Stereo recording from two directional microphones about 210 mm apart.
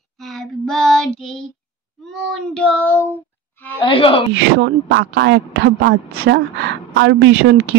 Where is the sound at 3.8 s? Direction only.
25° left (ahead or behind).